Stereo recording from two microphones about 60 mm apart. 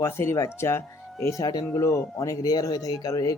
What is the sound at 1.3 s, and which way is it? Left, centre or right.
Speech, left.